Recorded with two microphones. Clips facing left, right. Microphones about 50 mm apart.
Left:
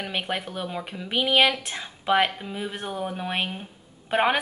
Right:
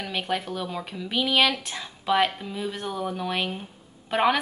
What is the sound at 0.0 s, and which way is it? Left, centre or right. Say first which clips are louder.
Speech: right 1 dB; left.